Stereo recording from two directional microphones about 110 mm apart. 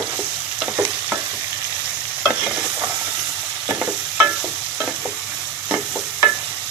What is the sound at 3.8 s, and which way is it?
Stir, 10° right (ahead or behind).